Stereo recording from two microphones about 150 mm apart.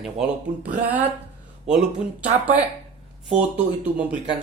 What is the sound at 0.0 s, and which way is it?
Speech, 5° right (ahead or behind).